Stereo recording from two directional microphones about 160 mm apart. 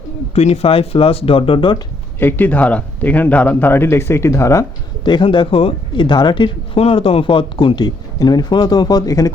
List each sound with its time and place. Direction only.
0.3 s speech: 40° left (ahead or behind)
2.1 s a man's voice: 10° left (ahead or behind)
5.0 s speech: 30° left (ahead or behind)